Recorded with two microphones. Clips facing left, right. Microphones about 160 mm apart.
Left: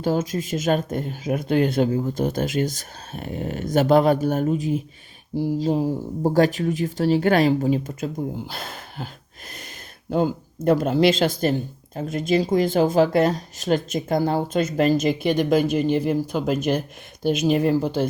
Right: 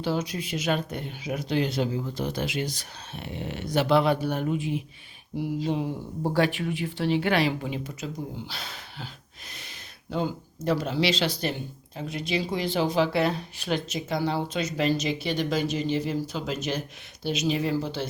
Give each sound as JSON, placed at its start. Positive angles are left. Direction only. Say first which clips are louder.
{"t": 0.0, "sound": "speech", "louder": "left 6 dB", "side_deg": 45}
{"t": 10.1, "sound": "speech", "louder": "left 7 dB", "side_deg": 45}